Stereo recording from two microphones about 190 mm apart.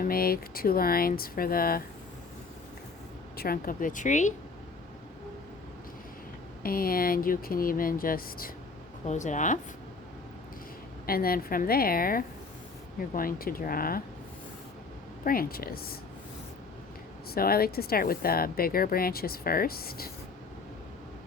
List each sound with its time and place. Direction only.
0.0 s speech: 50° left (ahead or behind)
3.3 s speech: 50° left (ahead or behind)
6.6 s speech: 50° left (ahead or behind)
11.0 s speech: 50° left (ahead or behind)
15.2 s speech: 50° left (ahead or behind)
17.3 s speech: 55° left (ahead or behind)